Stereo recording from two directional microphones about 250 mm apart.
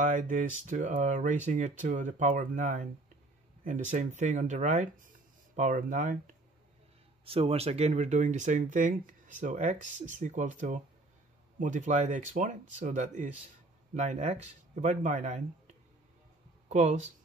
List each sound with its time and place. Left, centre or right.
0.0 s speech: right